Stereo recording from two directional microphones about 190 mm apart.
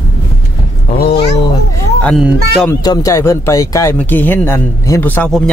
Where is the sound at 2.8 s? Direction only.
20° left (ahead or behind).